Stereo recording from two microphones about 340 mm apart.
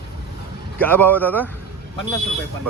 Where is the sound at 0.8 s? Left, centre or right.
Centre.